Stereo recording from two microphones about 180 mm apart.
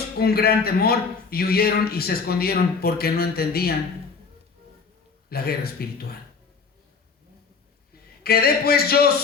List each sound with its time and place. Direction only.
0.2 s a man's voice: 60° left (ahead or behind)
5.3 s a man's voice: 60° left (ahead or behind)
8.2 s a man's voice: 60° left (ahead or behind)